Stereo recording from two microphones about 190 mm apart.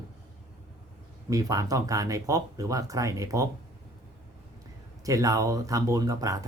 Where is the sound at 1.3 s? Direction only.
20° right (ahead or behind).